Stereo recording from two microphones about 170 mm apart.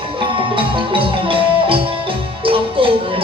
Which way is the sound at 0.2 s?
30° right (ahead or behind).